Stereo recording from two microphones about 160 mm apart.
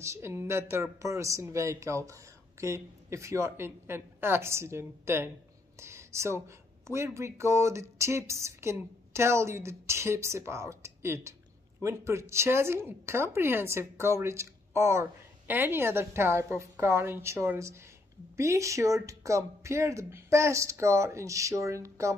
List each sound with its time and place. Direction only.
0.0 s a woman's voice: 15° right (ahead or behind)